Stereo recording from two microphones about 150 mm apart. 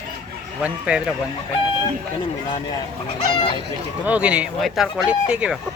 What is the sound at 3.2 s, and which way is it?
Speech, 35° left (ahead or behind).